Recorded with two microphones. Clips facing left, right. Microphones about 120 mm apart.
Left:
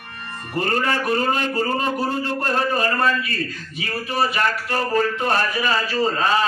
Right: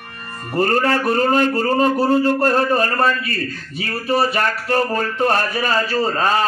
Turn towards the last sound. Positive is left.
turn(degrees=-40)  # may be behind; listen again after turning